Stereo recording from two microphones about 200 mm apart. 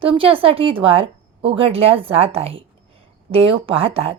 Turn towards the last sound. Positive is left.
turn(degrees=-30)  # may be behind; listen again after turning